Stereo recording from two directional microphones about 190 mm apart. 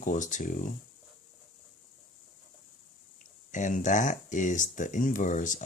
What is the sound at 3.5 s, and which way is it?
Speech, 40° left (ahead or behind).